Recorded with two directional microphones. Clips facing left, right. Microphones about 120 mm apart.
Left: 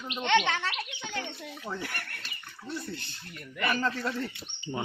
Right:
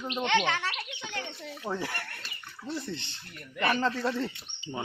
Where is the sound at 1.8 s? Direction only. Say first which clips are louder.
Right 3 dB; 30° right (ahead or behind).